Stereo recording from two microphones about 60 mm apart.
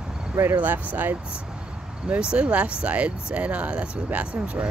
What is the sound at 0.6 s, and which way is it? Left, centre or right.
Speech, right.